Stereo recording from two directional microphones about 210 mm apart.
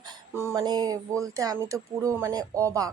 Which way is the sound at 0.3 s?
15° right (ahead or behind).